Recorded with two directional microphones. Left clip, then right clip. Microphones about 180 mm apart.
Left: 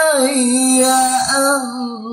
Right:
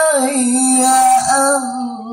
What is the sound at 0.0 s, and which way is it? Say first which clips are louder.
Music: even; 25° left (ahead or behind).